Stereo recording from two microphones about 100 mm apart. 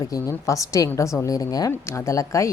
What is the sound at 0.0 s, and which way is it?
A woman's voice, 35° left (ahead or behind).